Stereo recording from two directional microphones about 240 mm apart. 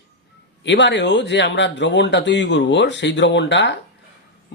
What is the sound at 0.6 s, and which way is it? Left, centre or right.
Speech, left.